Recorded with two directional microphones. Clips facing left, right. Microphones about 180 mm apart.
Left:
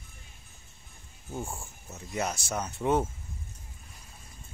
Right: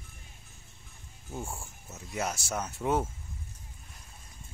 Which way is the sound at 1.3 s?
5° left (ahead or behind).